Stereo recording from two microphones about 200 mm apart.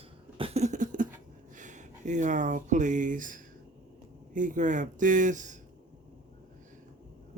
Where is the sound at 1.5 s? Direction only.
40° right (ahead or behind).